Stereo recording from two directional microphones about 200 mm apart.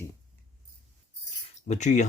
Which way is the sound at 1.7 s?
35° left (ahead or behind).